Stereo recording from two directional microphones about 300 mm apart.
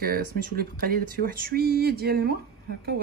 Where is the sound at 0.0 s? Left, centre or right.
Right.